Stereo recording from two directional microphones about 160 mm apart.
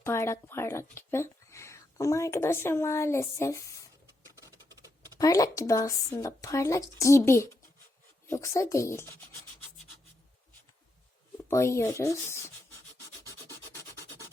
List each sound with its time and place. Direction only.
0.0 s speech: 15° left (ahead or behind)
5.1 s a woman's voice: 20° left (ahead or behind)
11.4 s speech: 15° left (ahead or behind)